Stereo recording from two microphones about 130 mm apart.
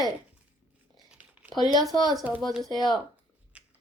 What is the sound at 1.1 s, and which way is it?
Crumpling, 10° right (ahead or behind).